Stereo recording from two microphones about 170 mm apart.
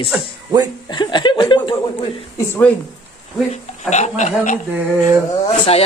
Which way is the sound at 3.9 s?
45° left (ahead or behind).